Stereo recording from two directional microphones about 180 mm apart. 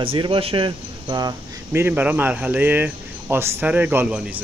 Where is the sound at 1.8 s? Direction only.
10° right (ahead or behind).